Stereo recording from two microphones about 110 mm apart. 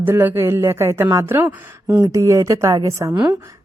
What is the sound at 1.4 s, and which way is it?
Speech, 10° right (ahead or behind).